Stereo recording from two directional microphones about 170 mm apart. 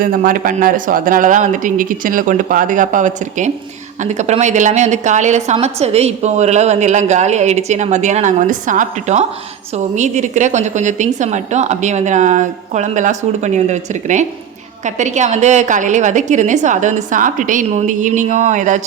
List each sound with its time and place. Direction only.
0.0 s a woman's voice: 55° right (ahead or behind)